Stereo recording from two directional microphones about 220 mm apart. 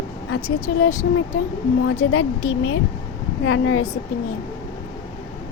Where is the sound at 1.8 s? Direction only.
65° left (ahead or behind).